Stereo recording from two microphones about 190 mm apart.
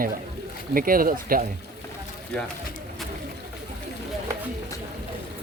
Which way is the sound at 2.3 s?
5° left (ahead or behind).